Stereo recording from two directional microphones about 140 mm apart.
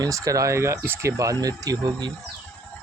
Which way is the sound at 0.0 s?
25° right (ahead or behind).